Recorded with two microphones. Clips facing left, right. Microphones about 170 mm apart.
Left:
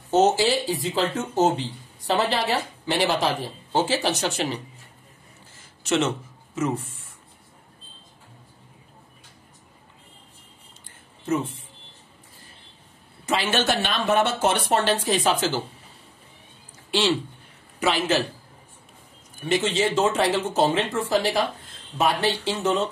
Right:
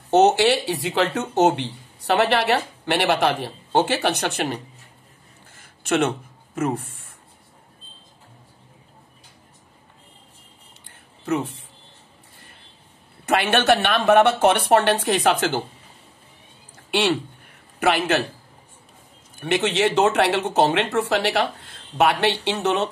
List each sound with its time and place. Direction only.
0.1 s speech: 70° right (ahead or behind)
5.5 s a sound: 55° right (ahead or behind)
11.2 s speech: 65° right (ahead or behind)
13.2 s speech: 60° right (ahead or behind)
16.9 s a man's voice: 55° right (ahead or behind)
19.4 s speech: 65° right (ahead or behind)